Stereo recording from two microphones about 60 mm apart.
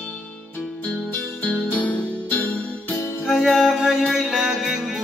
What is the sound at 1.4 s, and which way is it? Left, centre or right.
Music, left.